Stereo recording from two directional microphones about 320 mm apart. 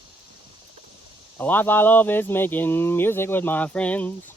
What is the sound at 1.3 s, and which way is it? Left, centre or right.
Speech, centre.